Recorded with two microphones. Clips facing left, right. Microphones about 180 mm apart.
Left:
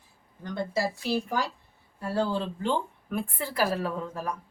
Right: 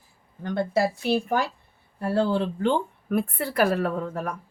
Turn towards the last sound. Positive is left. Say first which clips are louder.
# right 4 dB
turn(degrees=-60)  # may be behind; listen again after turning